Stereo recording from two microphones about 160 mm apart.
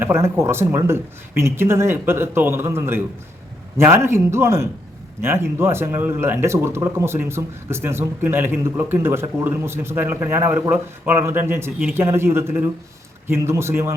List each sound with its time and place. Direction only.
0.0 s speech: 15° right (ahead or behind)